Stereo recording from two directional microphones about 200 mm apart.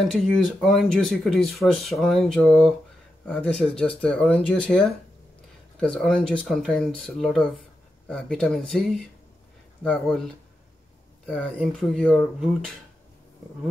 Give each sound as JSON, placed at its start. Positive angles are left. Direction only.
{"t": 0.1, "sound": "speech", "side_deg": 0}